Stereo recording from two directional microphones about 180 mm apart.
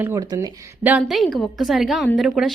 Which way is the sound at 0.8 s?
5° right (ahead or behind).